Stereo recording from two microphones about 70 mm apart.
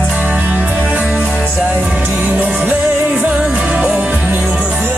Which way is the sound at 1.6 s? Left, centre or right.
Right.